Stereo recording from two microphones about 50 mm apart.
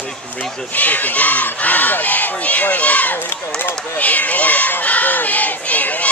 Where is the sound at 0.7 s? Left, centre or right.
Left.